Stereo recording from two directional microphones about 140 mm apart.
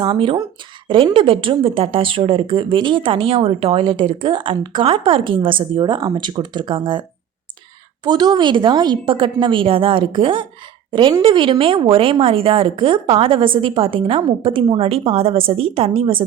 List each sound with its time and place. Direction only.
0.0 s a woman's voice: 35° right (ahead or behind)
8.0 s a woman's voice: 30° right (ahead or behind)